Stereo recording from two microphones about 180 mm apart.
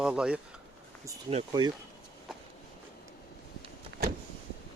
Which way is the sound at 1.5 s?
20° right (ahead or behind).